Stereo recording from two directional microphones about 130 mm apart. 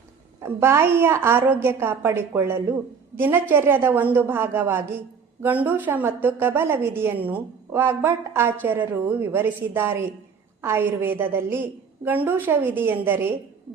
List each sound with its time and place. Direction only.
0.4 s a woman's voice: 20° right (ahead or behind)